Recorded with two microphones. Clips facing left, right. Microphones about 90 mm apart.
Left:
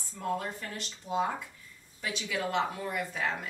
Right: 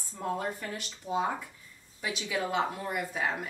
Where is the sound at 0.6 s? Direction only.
20° right (ahead or behind).